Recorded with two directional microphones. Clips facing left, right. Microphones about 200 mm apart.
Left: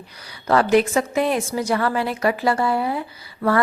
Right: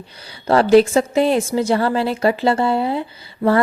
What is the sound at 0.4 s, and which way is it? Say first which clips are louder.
A woman's voice: right 5 dB; 30° right (ahead or behind).